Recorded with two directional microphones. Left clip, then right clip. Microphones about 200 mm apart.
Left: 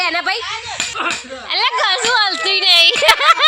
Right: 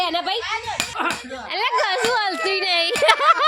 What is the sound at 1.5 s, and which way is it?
Speech, 10° right (ahead or behind).